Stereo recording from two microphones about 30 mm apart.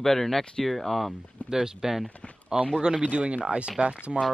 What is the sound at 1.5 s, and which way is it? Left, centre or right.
Speech, centre.